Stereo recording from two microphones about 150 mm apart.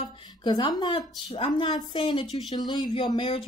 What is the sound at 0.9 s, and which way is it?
A woman's voice, 40° left (ahead or behind).